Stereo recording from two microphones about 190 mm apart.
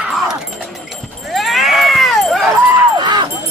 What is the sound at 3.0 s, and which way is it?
Music, 25° right (ahead or behind).